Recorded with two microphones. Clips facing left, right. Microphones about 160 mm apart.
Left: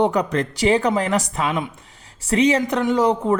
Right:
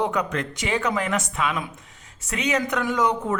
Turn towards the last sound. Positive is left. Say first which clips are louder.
# left 5 dB
turn(degrees=30)  # may be behind; listen again after turning